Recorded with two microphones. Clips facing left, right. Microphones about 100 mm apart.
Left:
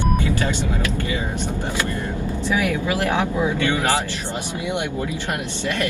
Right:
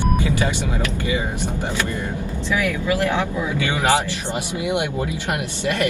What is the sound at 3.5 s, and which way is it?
Speech, 15° right (ahead or behind).